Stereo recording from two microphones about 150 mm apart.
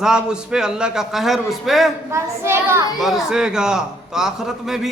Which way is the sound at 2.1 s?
15° right (ahead or behind).